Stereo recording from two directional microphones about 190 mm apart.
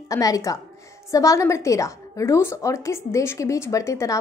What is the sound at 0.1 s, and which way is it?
A woman's voice, 20° left (ahead or behind).